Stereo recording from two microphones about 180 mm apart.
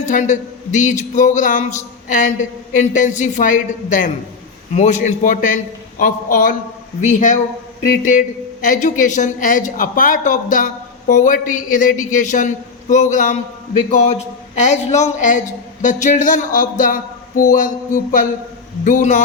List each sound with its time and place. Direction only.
0.0 s a man's voice: 45° left (ahead or behind)
8.6 s a man's voice: 45° left (ahead or behind)